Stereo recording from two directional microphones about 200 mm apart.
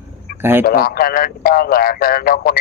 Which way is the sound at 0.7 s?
45° left (ahead or behind).